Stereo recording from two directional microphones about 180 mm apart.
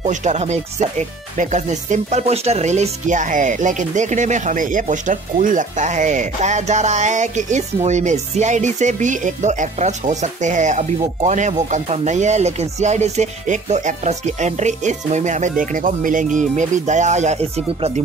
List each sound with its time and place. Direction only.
0.0 s speech: 40° right (ahead or behind)